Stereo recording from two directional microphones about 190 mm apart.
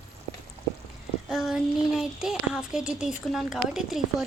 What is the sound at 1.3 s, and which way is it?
Speech, centre (ahead or behind).